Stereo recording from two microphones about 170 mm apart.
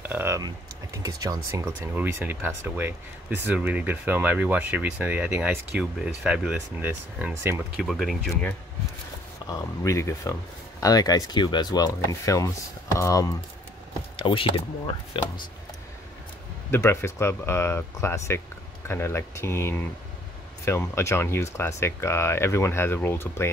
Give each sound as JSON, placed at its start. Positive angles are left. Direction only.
{"t": 0.1, "sound": "a sound", "side_deg": -15}
{"t": 0.9, "sound": "speech", "side_deg": -20}
{"t": 14.1, "sound": "speech", "side_deg": 30}
{"t": 16.7, "sound": "speech", "side_deg": 15}